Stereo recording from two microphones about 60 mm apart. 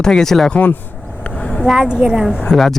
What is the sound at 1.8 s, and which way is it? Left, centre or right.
Speech, centre.